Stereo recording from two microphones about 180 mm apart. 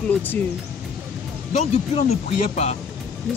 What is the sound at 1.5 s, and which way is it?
Speech, 35° left (ahead or behind).